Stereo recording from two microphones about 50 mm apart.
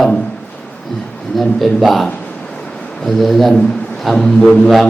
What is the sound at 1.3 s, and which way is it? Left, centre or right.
Speech, centre.